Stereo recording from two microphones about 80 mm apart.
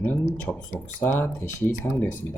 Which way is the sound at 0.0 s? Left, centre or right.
Left.